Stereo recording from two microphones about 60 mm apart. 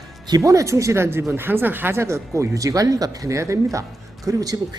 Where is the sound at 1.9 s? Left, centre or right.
Right.